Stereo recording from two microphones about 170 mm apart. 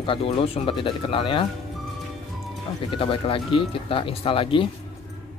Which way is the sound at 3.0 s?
30° left (ahead or behind).